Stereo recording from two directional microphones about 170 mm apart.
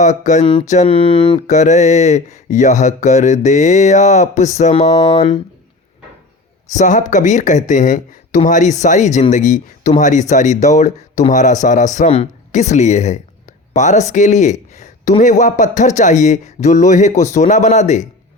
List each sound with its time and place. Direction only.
0.0 s speech: 45° left (ahead or behind)
0.7 s a sound: 40° left (ahead or behind)
1.4 s speech: 45° left (ahead or behind)
6.7 s speech: 45° left (ahead or behind)
14.1 s a sound: 45° left (ahead or behind)
15.2 s speech: 45° left (ahead or behind)